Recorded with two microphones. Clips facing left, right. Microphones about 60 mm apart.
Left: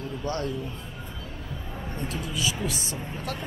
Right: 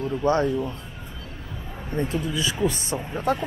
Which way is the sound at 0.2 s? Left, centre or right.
Right.